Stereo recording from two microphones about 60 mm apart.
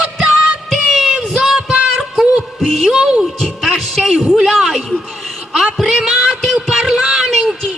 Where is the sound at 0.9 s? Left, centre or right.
Centre.